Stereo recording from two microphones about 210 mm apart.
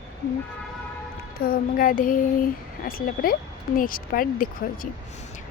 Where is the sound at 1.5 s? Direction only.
40° left (ahead or behind).